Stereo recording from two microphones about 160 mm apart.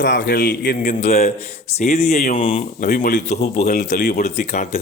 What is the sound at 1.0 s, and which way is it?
Speech, 45° left (ahead or behind).